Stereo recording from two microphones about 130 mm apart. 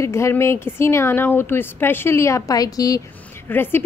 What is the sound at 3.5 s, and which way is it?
Speech, 15° left (ahead or behind).